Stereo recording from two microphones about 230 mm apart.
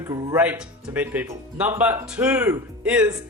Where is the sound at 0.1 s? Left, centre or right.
Centre.